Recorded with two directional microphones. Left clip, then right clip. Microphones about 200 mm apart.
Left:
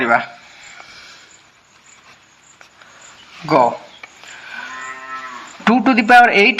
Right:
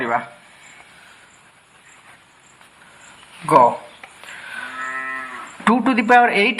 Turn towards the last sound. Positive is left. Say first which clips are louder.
# left 4 dB
turn(degrees=25)  # may be behind; listen again after turning